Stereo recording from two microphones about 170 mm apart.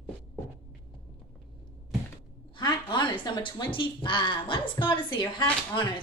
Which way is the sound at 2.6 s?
25° left (ahead or behind).